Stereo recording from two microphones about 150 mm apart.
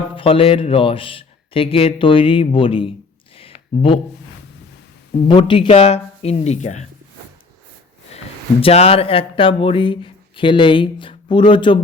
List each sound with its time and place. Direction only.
0.2 s speech: 35° left (ahead or behind)
3.3 s a sound: 40° left (ahead or behind)
5.3 s speech: 35° left (ahead or behind); by 6.8 s 50° left (ahead or behind)
8.6 s speech: 40° left (ahead or behind)